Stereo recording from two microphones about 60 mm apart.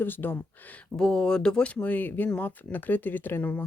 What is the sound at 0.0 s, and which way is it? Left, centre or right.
Speech, left.